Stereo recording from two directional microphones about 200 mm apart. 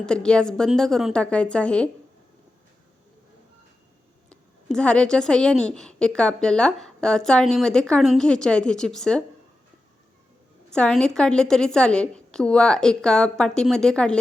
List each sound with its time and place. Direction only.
0.0 s a woman's voice: 5° left (ahead or behind)
4.3 s a woman's voice: 5° left (ahead or behind)
10.7 s a woman's voice: 5° left (ahead or behind)